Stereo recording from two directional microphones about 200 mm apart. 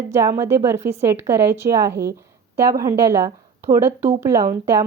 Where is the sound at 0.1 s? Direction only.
15° right (ahead or behind).